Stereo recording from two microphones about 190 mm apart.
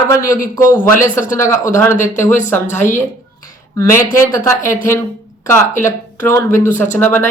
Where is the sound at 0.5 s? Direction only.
10° left (ahead or behind).